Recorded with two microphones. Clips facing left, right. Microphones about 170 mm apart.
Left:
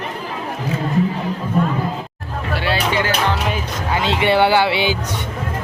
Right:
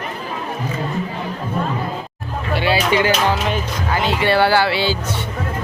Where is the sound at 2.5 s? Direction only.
Centre (ahead or behind).